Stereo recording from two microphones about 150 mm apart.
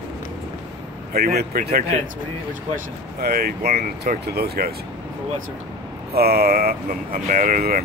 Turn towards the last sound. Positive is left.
turn(degrees=-75)  # may be behind; listen again after turning